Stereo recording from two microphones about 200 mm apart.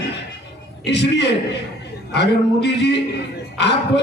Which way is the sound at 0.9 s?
60° left (ahead or behind).